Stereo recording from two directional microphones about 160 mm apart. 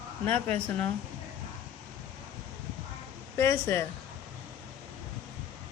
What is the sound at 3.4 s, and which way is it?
Speech, 15° left (ahead or behind).